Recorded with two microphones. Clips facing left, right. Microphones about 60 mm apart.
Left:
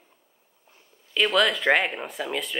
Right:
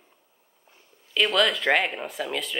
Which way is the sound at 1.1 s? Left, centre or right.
Centre.